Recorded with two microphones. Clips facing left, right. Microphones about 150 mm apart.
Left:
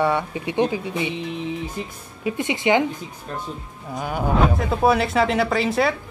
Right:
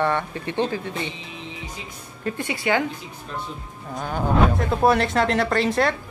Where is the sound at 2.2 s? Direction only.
15° left (ahead or behind).